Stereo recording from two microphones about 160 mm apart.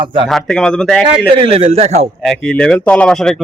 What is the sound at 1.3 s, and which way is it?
Speech, 35° right (ahead or behind).